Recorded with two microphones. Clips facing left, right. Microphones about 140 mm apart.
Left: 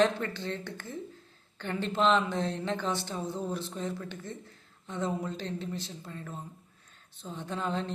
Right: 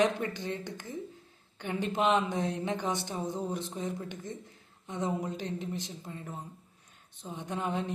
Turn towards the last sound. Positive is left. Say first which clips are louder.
# even
turn(degrees=-15)  # may be behind; listen again after turning